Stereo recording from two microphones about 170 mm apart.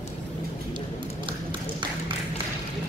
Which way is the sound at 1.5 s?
30° right (ahead or behind).